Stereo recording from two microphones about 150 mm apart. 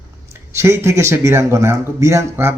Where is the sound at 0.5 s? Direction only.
15° right (ahead or behind).